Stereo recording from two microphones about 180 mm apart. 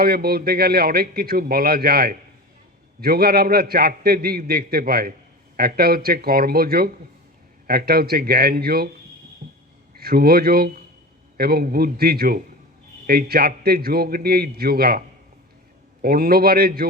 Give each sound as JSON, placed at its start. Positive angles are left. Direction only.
{"t": 0.0, "sound": "a man's voice", "side_deg": -60}
{"t": 9.4, "sound": "a sound", "side_deg": -50}
{"t": 10.0, "sound": "a man's voice", "side_deg": -55}